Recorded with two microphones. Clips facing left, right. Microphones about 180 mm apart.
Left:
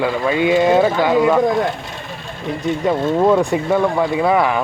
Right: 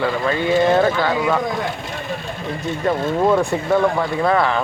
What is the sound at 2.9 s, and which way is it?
Speech, 15° left (ahead or behind).